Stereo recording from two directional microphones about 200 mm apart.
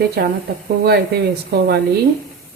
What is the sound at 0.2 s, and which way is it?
Speech, 50° right (ahead or behind).